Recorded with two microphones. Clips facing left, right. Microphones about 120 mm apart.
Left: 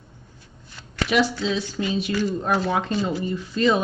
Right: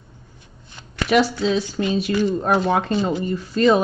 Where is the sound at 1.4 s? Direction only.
50° right (ahead or behind).